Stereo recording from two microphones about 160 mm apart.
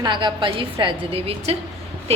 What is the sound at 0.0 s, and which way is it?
A woman's voice, 30° right (ahead or behind).